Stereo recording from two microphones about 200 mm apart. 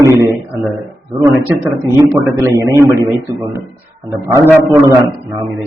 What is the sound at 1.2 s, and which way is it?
A man's voice, 15° right (ahead or behind).